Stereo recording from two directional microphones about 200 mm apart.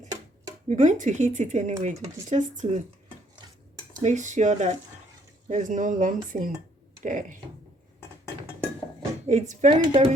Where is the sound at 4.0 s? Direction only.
35° right (ahead or behind).